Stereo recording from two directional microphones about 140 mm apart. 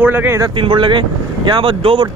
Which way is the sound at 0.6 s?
35° right (ahead or behind).